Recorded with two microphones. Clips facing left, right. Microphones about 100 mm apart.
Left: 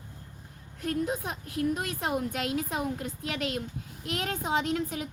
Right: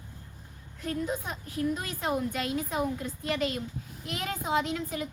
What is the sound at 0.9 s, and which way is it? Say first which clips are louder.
A woman's voice: left 2 dB; 70° left (ahead or behind).